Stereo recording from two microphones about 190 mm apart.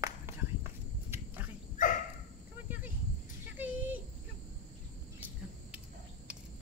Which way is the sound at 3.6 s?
10° right (ahead or behind).